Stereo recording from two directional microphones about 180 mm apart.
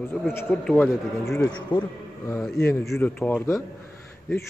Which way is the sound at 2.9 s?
10° left (ahead or behind).